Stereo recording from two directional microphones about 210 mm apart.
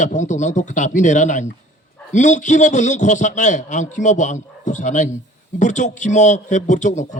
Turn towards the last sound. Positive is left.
turn(degrees=35)  # may be behind; listen again after turning